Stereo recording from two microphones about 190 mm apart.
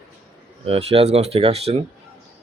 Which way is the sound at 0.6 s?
30° right (ahead or behind).